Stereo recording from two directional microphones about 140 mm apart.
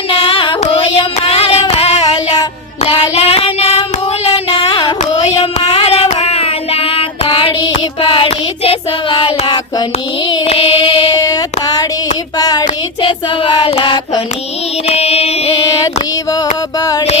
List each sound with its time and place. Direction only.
0.1 s child singing: 40° left (ahead or behind)
4.5 s carnatic music: 30° left (ahead or behind)
5.4 s child singing: 45° left (ahead or behind)
11.2 s a sound: 25° left (ahead or behind)
11.6 s child singing: 25° left (ahead or behind)
14.8 s a sound: 45° left (ahead or behind)
16.0 s female singing: 30° left (ahead or behind)